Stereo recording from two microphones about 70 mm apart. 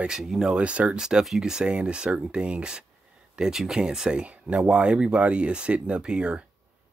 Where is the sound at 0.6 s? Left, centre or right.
Centre.